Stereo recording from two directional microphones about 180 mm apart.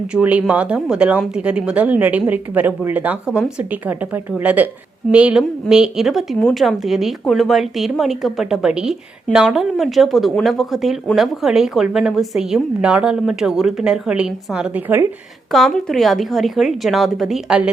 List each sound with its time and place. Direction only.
0.1 s a woman's voice: 5° right (ahead or behind)
15.5 s a woman's voice: centre (ahead or behind)